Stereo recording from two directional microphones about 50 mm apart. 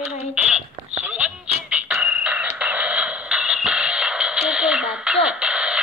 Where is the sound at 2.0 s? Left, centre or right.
Right.